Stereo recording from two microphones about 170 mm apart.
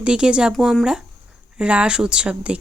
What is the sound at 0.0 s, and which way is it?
A woman's voice, 5° right (ahead or behind).